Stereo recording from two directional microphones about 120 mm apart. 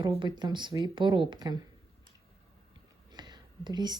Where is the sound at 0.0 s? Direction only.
35° right (ahead or behind).